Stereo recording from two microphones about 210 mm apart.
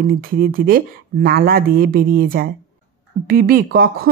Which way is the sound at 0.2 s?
45° right (ahead or behind).